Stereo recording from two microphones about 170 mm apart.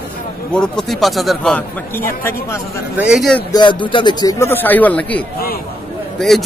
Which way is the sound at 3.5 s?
30° left (ahead or behind).